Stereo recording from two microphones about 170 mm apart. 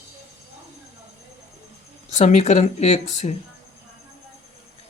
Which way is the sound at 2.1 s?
45° left (ahead or behind).